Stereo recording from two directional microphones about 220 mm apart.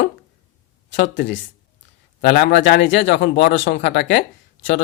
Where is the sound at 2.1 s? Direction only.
45° left (ahead or behind).